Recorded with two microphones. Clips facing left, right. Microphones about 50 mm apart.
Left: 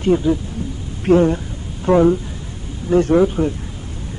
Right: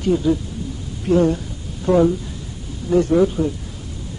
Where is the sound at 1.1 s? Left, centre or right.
Left.